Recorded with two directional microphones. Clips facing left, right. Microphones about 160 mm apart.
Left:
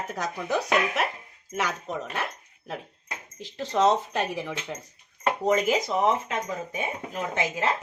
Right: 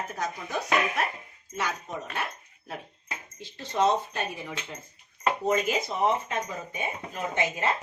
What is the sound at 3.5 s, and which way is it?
Speech, 90° left.